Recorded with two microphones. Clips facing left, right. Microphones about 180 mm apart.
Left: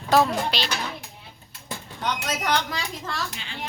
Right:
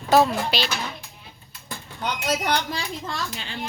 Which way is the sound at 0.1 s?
5° right (ahead or behind).